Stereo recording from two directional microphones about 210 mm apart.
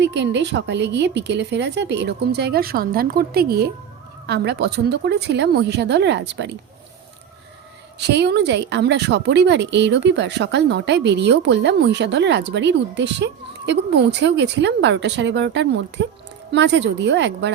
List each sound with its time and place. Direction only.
0.0 s a woman's voice: 55° right (ahead or behind)
7.9 s a woman's voice: 55° right (ahead or behind)